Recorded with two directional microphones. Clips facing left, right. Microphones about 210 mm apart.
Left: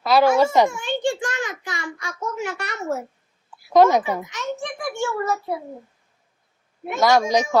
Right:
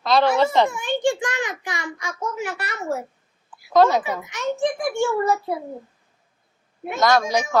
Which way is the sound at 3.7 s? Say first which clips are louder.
Left 2 dB; 15° left (ahead or behind).